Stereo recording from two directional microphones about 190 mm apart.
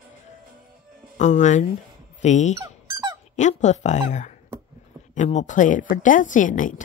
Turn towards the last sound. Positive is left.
turn(degrees=45)  # may be behind; listen again after turning